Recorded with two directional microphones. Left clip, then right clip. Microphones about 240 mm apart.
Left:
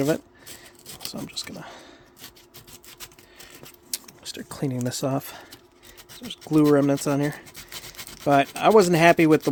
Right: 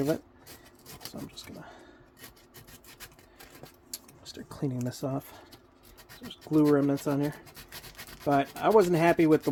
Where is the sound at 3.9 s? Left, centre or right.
Left.